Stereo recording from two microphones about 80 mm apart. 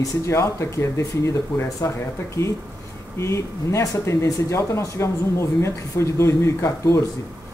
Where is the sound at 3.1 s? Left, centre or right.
Left.